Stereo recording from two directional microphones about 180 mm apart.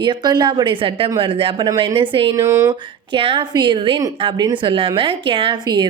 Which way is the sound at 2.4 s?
15° right (ahead or behind).